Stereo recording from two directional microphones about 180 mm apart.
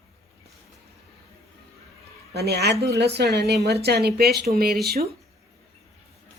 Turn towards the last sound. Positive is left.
turn(degrees=-60)  # may be behind; listen again after turning